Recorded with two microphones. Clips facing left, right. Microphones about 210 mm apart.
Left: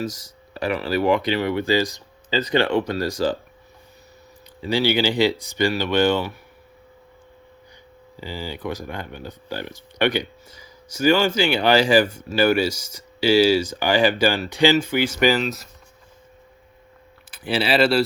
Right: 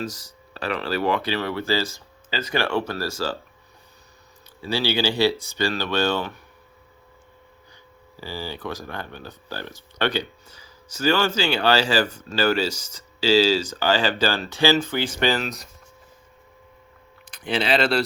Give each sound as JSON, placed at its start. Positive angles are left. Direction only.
{"t": 0.0, "sound": "speech", "side_deg": 10}
{"t": 4.6, "sound": "speech", "side_deg": 15}
{"t": 8.1, "sound": "speech", "side_deg": 15}
{"t": 17.4, "sound": "speech", "side_deg": 5}